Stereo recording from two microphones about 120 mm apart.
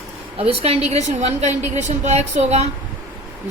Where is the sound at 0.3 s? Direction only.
55° right (ahead or behind).